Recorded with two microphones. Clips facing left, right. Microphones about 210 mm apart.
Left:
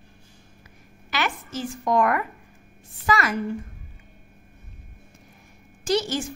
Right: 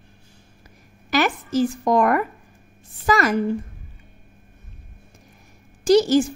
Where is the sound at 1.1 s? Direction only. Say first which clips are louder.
Right 7 dB; 40° right (ahead or behind).